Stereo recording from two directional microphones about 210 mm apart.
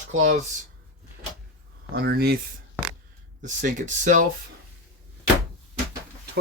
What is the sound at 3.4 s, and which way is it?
Speech, 35° right (ahead or behind).